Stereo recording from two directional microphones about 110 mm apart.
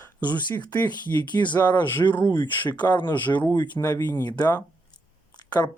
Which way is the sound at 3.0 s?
15° left (ahead or behind).